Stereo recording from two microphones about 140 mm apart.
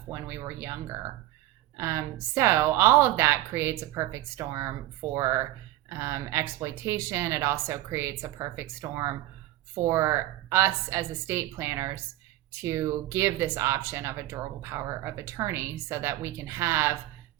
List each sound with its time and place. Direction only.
0.1 s speech: 20° right (ahead or behind)